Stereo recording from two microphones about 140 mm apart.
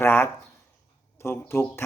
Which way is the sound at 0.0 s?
15° left (ahead or behind).